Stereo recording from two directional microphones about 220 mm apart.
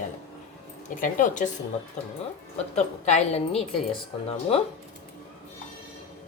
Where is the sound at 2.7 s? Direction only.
30° left (ahead or behind).